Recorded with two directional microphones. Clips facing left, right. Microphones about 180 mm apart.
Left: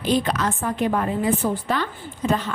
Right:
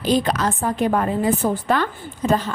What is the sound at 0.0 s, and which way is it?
A woman's voice, 40° right (ahead or behind).